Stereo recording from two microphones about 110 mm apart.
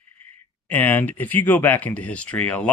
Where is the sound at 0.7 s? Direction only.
15° left (ahead or behind).